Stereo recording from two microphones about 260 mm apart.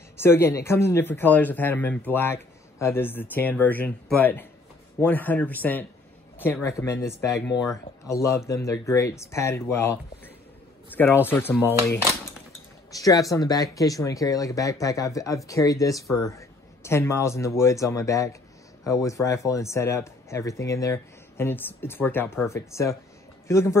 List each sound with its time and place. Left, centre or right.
0.2 s speech: centre